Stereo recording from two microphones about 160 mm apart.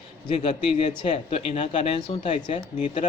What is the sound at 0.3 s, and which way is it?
Speech, 45° left (ahead or behind).